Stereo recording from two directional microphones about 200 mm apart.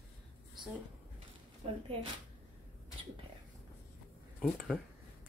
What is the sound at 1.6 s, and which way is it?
Speech, 25° right (ahead or behind).